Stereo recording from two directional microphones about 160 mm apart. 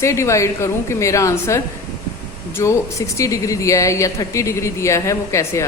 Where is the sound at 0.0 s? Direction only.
20° left (ahead or behind).